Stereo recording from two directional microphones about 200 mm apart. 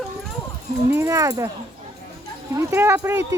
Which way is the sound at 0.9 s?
15° right (ahead or behind).